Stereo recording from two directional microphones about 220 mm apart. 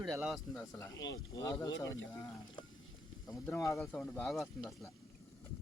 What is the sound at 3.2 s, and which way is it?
Speech, 10° left (ahead or behind).